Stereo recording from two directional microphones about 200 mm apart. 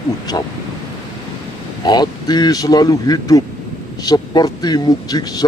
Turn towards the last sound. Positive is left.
turn(degrees=20)  # may be behind; listen again after turning